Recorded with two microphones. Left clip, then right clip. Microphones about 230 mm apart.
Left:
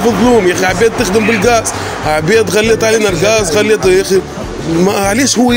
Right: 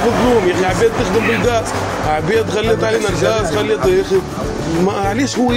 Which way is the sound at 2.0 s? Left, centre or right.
Left.